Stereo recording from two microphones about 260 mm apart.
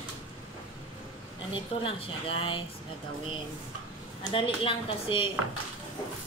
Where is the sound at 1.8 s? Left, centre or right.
Left.